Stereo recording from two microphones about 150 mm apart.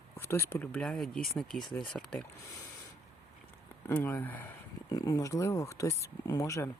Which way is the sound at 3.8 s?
15° left (ahead or behind).